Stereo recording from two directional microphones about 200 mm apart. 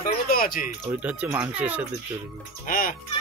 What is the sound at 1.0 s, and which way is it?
Speech, 5° right (ahead or behind).